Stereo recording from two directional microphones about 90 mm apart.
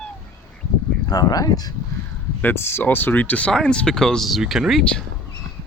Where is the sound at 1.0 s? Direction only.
45° left (ahead or behind).